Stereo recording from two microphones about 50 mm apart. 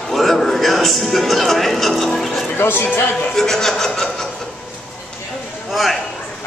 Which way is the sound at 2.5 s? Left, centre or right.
Left.